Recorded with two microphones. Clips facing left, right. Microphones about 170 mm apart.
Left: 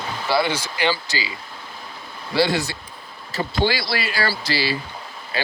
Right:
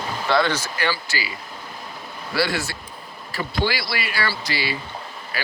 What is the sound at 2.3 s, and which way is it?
Speech, 20° left (ahead or behind).